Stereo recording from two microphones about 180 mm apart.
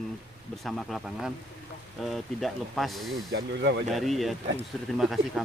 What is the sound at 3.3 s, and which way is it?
Speech, 70° right (ahead or behind).